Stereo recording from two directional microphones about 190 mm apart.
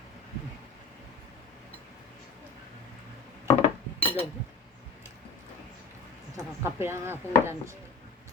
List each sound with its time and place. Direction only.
3.4 s dishes: 30° left (ahead or behind)
6.3 s speech: 15° right (ahead or behind)